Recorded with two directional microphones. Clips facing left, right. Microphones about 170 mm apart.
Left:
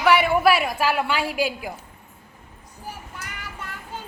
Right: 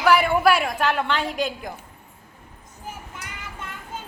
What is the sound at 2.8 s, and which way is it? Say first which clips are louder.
Child singing: even; 20° right (ahead or behind).